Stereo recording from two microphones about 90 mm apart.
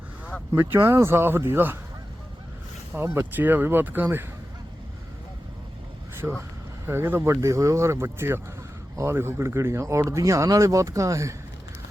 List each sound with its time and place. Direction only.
0.5 s speech: 30° right (ahead or behind)
2.9 s speech: 25° right (ahead or behind)
6.2 s speech: 5° right (ahead or behind)
6.8 s speech: 25° right (ahead or behind)